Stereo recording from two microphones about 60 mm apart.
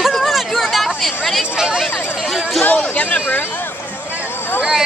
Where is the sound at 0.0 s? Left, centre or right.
Centre.